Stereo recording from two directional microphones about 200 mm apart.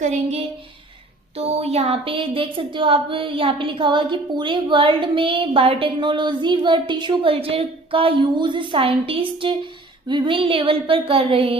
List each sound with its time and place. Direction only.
0.0 s a woman's voice: 35° right (ahead or behind)